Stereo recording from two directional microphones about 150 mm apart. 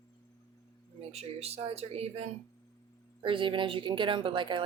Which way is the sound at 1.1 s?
45° right (ahead or behind).